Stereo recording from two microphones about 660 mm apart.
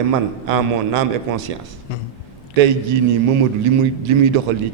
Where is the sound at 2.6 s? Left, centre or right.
Right.